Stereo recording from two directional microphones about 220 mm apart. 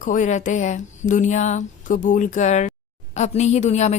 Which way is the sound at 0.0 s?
35° left (ahead or behind).